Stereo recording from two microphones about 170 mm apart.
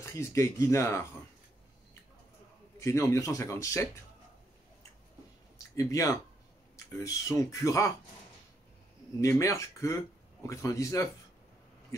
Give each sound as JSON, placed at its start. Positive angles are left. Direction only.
{"t": 0.0, "sound": "speech", "side_deg": 15}
{"t": 2.8, "sound": "speech", "side_deg": 15}
{"t": 5.8, "sound": "speech", "side_deg": 20}
{"t": 9.2, "sound": "speech", "side_deg": 20}